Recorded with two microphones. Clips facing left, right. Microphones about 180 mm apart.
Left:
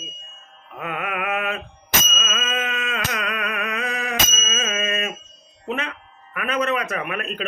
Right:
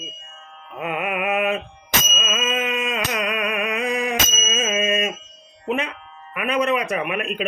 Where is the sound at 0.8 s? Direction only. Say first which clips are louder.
Right 3 dB; 20° right (ahead or behind).